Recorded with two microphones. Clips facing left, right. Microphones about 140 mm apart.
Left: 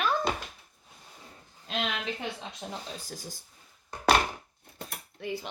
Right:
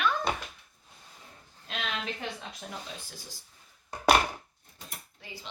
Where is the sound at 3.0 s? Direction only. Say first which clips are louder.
Left 5 dB; 40° left (ahead or behind).